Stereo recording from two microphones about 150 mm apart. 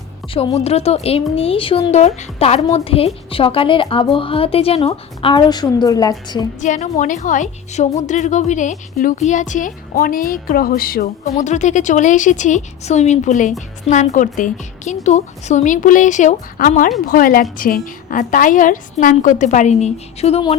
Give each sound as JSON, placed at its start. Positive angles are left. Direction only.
{"t": 0.3, "sound": "a woman's voice", "side_deg": 40}
{"t": 6.6, "sound": "a woman's voice", "side_deg": 50}
{"t": 11.3, "sound": "a woman's voice", "side_deg": 50}